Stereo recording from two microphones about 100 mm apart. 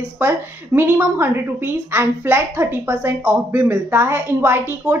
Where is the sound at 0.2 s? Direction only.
20° right (ahead or behind).